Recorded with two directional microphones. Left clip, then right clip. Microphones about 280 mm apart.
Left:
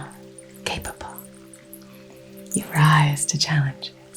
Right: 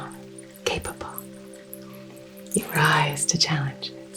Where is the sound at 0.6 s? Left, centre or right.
Left.